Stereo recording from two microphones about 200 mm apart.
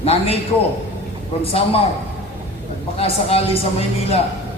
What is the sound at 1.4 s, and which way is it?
Speech, 30° left (ahead or behind).